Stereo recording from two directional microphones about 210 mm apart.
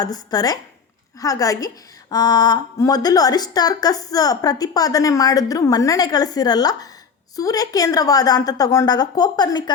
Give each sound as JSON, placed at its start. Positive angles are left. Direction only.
{"t": 0.0, "sound": "a woman's voice", "side_deg": 20}